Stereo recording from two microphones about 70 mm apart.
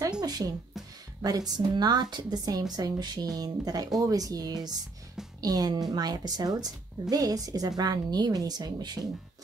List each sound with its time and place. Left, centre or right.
0.2 s a woman's voice: right